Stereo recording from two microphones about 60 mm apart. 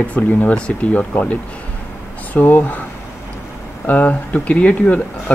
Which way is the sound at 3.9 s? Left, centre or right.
Left.